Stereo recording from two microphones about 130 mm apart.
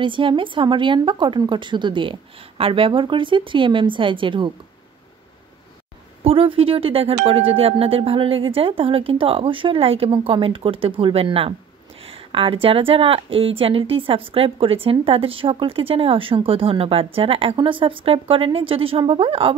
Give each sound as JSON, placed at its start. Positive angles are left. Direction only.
{"t": 0.0, "sound": "a woman's voice", "side_deg": -40}
{"t": 6.2, "sound": "speech", "side_deg": -45}